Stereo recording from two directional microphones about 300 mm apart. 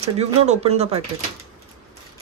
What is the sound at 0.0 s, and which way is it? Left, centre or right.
Speech, right.